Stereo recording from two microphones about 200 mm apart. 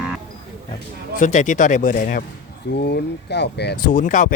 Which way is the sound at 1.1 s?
40° left (ahead or behind).